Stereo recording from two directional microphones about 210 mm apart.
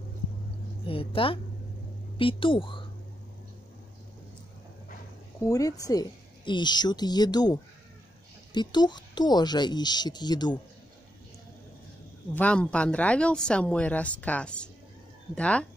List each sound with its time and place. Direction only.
0.8 s a woman's voice: 25° left (ahead or behind)
5.4 s a woman's voice: 15° left (ahead or behind)
12.4 s speech: 5° left (ahead or behind)